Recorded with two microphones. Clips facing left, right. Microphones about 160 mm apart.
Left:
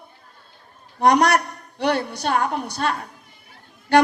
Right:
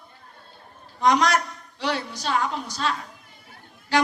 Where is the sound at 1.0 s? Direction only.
60° left (ahead or behind).